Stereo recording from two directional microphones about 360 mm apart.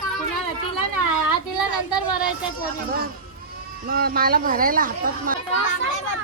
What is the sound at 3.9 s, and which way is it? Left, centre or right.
Speech, right.